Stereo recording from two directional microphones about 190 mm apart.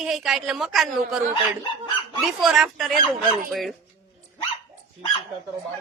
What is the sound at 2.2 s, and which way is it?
A man's voice, centre (ahead or behind).